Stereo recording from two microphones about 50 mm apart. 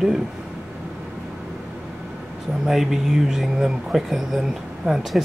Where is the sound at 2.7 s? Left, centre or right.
Centre.